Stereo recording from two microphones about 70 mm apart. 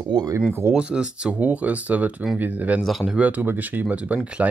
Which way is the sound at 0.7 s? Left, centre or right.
Centre.